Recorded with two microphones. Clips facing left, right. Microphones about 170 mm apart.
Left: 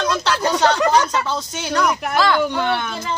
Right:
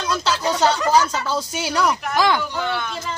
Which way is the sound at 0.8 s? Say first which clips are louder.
Left 1 dB; 60° left (ahead or behind).